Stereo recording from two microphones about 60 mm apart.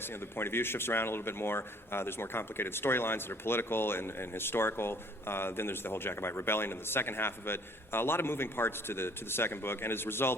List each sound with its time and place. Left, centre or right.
0.3 s a man's voice: left